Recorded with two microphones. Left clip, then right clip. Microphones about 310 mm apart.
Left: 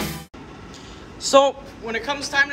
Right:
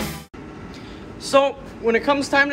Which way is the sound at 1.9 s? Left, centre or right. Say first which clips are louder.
Right 3 dB; centre.